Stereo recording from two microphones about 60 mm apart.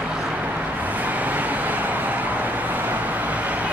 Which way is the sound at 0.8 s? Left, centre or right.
Right.